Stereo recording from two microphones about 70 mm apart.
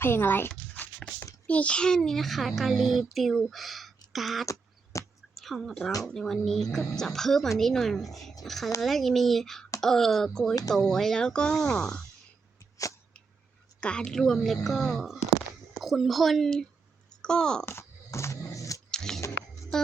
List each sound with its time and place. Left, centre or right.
0.0 s speech: left
1.5 s a child's voice: centre
4.4 s beatboxing: left
5.3 s a child's voice: centre
13.8 s a child's voice: centre
17.7 s dog: left
18.9 s a sound: centre
19.7 s music: centre